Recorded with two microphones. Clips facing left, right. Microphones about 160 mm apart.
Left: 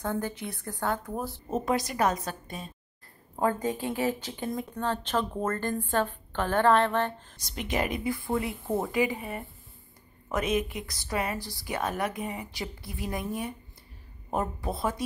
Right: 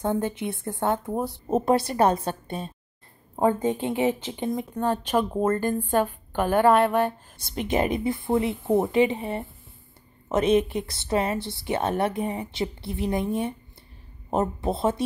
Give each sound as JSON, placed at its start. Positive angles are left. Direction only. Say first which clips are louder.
{"t": 0.0, "sound": "a woman's voice", "louder": "right 6 dB", "side_deg": -20}
{"t": 7.3, "sound": "speech", "louder": "right 5 dB", "side_deg": -30}